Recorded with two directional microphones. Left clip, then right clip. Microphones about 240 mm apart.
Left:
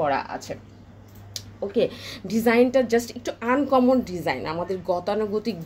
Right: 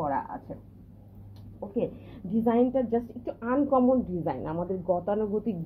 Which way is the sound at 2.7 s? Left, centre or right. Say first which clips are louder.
Left 7 dB; left.